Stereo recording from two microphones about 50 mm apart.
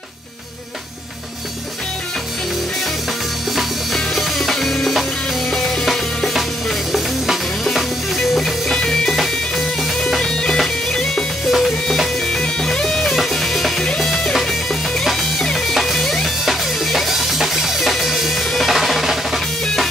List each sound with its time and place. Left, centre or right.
3.5 s music: centre
11.4 s music: centre
12.3 s music: centre
16.4 s drum kit: centre
19.6 s music: centre